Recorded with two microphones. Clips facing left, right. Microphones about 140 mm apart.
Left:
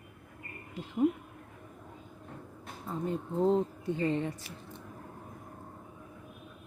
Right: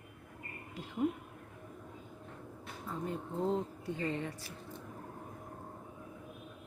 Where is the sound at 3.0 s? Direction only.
25° left (ahead or behind).